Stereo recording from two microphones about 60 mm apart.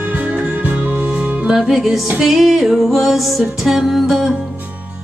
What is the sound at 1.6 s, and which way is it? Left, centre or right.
Music, centre.